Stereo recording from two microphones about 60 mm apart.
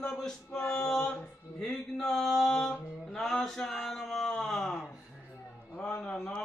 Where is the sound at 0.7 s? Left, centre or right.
Centre.